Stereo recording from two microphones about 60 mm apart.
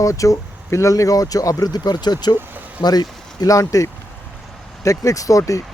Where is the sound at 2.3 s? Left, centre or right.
Left.